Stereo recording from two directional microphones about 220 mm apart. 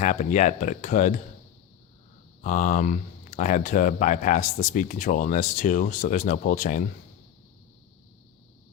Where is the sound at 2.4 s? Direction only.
35° left (ahead or behind).